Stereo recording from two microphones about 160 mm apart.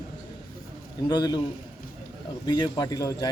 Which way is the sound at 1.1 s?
25° left (ahead or behind).